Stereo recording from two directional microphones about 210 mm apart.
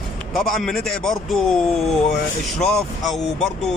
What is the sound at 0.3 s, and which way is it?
Speech, centre (ahead or behind).